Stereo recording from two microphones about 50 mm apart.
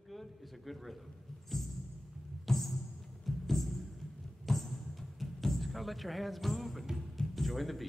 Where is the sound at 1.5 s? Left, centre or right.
Centre.